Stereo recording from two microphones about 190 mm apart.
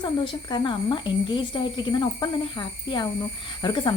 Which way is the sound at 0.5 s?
25° left (ahead or behind).